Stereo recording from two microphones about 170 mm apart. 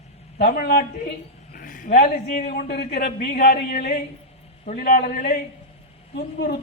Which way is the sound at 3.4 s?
55° left (ahead or behind).